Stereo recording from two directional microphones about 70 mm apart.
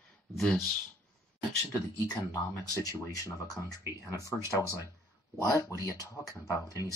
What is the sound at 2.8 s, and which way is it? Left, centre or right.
Speech, left.